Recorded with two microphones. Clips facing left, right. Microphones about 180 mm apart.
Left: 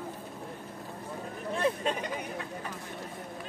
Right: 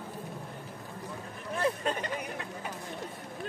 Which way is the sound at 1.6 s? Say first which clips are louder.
Left 1 dB; 15° left (ahead or behind).